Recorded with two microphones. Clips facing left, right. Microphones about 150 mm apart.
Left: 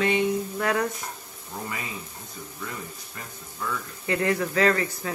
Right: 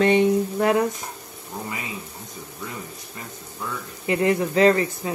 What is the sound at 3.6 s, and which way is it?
Speech, 20° right (ahead or behind).